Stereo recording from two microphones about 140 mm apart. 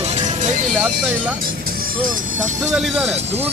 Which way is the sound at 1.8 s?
75° right (ahead or behind).